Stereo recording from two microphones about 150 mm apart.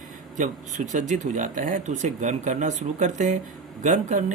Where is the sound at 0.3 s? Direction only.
55° right (ahead or behind).